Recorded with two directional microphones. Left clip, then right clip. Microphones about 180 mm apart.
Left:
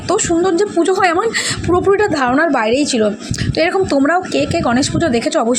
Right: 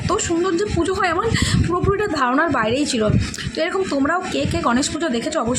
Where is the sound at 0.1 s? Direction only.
25° left (ahead or behind).